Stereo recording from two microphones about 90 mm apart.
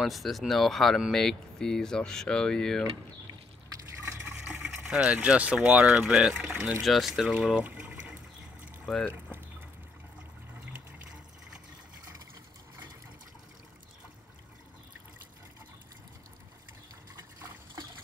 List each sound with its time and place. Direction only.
0.0 s speech: centre (ahead or behind)
4.0 s water: 25° right (ahead or behind)
4.4 s water: 5° right (ahead or behind)
4.7 s speech: 15° right (ahead or behind)
7.3 s water: 10° right (ahead or behind)
8.9 s speech: centre (ahead or behind)